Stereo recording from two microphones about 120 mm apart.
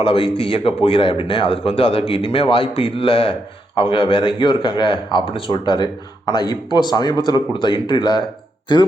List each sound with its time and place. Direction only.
0.0 s a man's voice: 50° left (ahead or behind)